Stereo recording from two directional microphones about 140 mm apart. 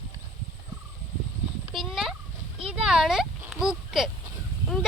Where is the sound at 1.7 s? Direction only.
Centre (ahead or behind).